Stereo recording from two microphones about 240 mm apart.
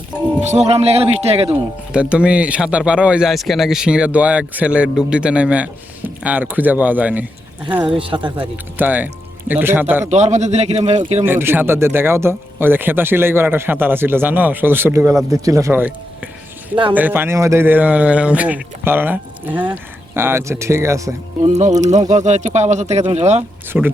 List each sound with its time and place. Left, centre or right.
0.4 s speech: right
1.9 s speech: centre
7.9 s speech: right
8.4 s speech: centre
10.1 s speech: right
11.3 s speech: centre
16.9 s speech: centre
21.8 s speech: right
23.7 s speech: centre